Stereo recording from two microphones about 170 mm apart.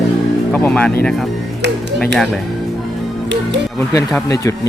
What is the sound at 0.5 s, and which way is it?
Speech, 10° left (ahead or behind).